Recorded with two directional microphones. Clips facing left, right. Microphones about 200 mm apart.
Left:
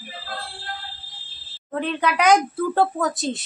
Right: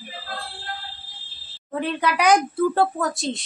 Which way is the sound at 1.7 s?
5° right (ahead or behind).